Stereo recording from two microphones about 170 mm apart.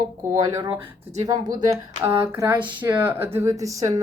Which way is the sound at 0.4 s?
20° right (ahead or behind).